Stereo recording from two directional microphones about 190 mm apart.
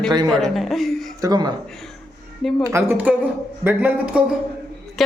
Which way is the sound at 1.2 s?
20° right (ahead or behind).